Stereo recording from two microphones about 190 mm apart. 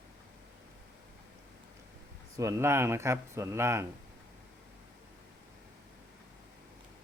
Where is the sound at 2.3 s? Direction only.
15° right (ahead or behind).